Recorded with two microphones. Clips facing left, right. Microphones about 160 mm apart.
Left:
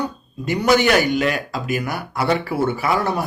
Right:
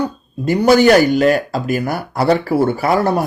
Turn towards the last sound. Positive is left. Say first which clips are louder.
# right 5 dB
turn(degrees=-40)  # may be behind; listen again after turning